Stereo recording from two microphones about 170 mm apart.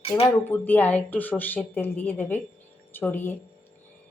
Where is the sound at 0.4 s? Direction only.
10° left (ahead or behind).